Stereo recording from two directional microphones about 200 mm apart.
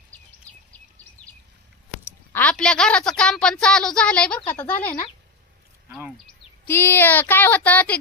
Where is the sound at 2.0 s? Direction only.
10° left (ahead or behind).